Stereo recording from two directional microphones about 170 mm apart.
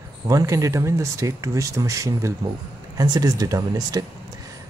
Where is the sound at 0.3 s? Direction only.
20° right (ahead or behind).